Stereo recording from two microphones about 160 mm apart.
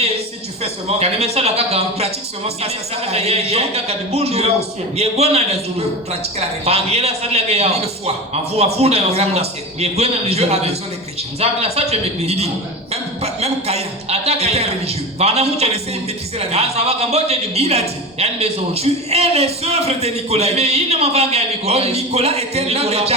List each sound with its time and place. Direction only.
0.6 s a man's voice: 40° right (ahead or behind)
6.7 s a man's voice: 40° right (ahead or behind)